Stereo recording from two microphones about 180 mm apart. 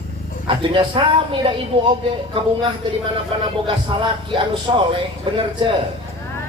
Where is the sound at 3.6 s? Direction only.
25° right (ahead or behind).